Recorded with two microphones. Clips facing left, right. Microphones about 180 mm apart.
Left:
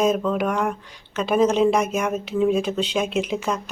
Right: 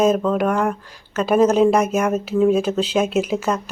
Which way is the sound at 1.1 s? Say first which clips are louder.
Right 3 dB; 5° right (ahead or behind).